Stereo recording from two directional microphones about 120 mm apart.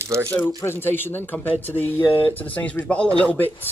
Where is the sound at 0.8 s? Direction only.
20° left (ahead or behind).